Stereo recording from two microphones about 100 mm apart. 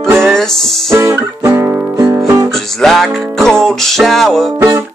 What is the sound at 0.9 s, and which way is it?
Music, 25° right (ahead or behind).